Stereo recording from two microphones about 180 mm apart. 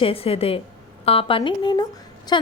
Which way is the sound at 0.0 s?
30° left (ahead or behind).